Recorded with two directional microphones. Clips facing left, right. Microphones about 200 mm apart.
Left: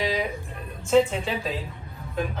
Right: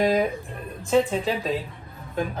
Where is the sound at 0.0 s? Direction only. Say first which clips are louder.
Right 6 dB; 50° right (ahead or behind).